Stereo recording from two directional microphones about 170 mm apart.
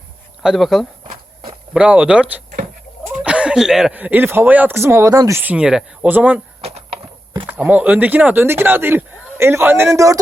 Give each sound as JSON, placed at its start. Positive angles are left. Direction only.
{"t": 0.4, "sound": "speech", "side_deg": 0}
{"t": 6.6, "sound": "a sound", "side_deg": -35}
{"t": 7.4, "sound": "speech", "side_deg": -10}